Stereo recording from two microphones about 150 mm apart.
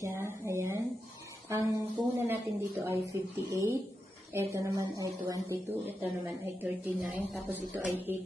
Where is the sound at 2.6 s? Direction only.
15° right (ahead or behind).